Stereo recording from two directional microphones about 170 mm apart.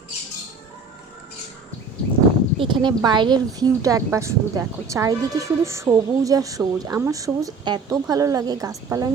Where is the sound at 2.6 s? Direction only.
30° right (ahead or behind).